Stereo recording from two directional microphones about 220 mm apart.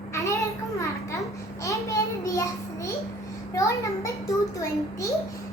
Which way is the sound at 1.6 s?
15° left (ahead or behind).